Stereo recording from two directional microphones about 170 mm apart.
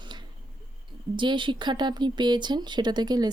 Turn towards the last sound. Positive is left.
turn(degrees=-25)  # may be behind; listen again after turning